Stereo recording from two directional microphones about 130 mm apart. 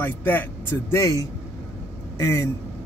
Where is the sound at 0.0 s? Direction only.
15° left (ahead or behind).